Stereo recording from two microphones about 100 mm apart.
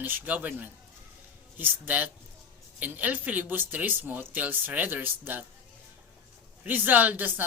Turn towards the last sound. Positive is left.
turn(degrees=-20)  # may be behind; listen again after turning